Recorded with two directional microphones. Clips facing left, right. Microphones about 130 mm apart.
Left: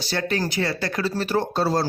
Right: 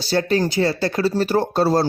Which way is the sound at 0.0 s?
30° right (ahead or behind).